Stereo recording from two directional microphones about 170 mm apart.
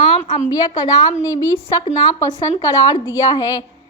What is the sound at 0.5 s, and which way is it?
A woman's voice, 20° left (ahead or behind).